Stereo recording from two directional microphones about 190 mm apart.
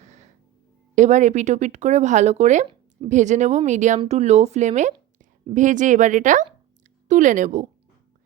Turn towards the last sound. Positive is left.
turn(degrees=-40)  # may be behind; listen again after turning